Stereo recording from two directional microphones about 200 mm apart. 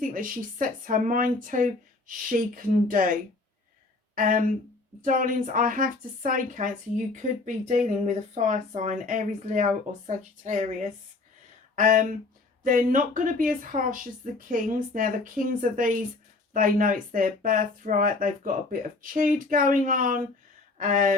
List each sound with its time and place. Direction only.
0.0 s speech: 45° right (ahead or behind)
4.1 s speech: 40° right (ahead or behind)